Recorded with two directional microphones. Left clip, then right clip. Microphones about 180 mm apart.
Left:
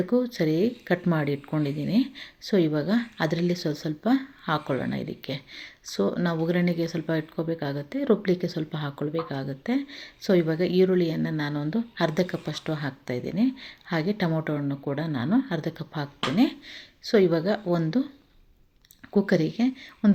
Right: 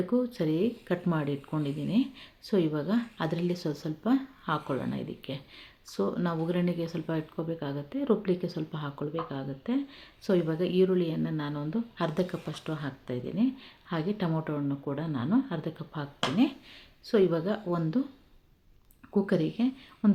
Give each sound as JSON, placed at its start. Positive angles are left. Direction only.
{"t": 0.1, "sound": "speech", "side_deg": 15}
{"t": 19.1, "sound": "speech", "side_deg": 20}